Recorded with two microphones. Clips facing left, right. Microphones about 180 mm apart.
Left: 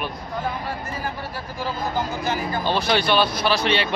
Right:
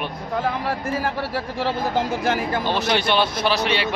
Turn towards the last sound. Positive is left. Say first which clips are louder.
# even
turn(degrees=-15)  # may be behind; listen again after turning